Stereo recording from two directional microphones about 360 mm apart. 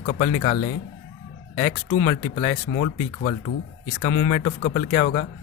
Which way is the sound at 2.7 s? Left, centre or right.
Left.